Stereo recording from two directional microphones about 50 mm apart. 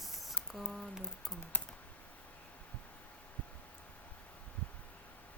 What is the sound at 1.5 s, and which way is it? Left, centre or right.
Computer keyboard, left.